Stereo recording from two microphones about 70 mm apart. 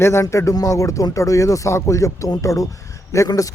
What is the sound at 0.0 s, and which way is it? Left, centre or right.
Speech, left.